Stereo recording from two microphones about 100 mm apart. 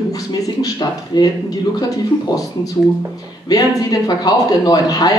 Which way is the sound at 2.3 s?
45° left (ahead or behind).